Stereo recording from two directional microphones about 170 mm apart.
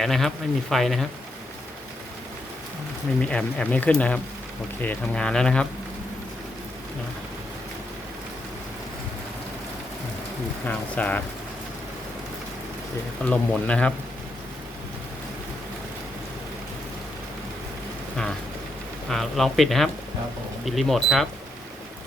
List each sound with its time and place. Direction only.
0.0 s speech: centre (ahead or behind)
3.2 s speech: 5° left (ahead or behind)
10.7 s speech: 10° left (ahead or behind)
13.3 s speech: 5° left (ahead or behind)
19.0 s speech: centre (ahead or behind)